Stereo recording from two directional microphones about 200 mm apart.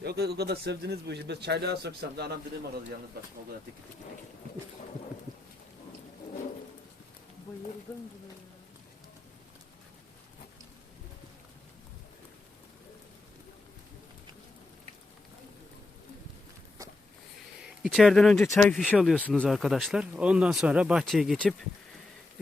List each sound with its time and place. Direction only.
0.0 s speech: 55° right (ahead or behind)
17.8 s speech: centre (ahead or behind)